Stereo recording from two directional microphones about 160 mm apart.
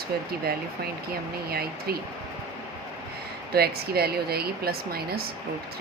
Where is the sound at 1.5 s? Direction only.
70° right (ahead or behind).